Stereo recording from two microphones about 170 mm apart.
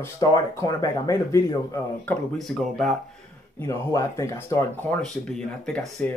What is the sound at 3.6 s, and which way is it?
A man's voice, 15° left (ahead or behind).